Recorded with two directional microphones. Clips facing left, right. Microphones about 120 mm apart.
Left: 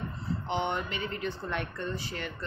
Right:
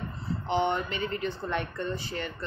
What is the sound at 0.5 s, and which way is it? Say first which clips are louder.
Speech: right 5 dB; 15° left (ahead or behind).